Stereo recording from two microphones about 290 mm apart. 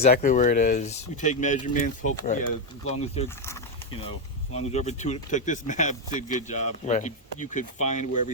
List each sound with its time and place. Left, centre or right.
0.0 s speech: left
4.5 s speech: left